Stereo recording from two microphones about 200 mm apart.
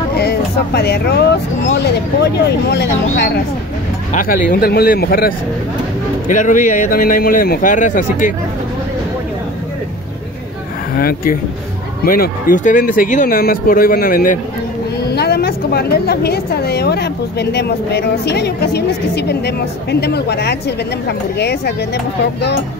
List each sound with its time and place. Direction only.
0.2 s a woman's voice: 55° left (ahead or behind)
4.1 s speech: 45° left (ahead or behind)
11.0 s a woman's voice: 45° left (ahead or behind)